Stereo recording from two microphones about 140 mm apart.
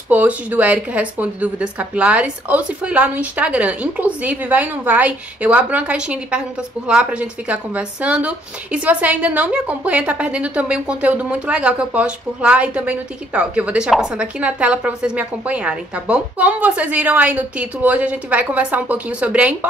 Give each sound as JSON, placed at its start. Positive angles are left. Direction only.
{"t": 0.1, "sound": "a woman's voice", "side_deg": -10}